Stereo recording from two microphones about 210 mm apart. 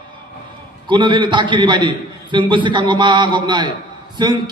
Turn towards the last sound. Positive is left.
turn(degrees=-20)  # may be behind; listen again after turning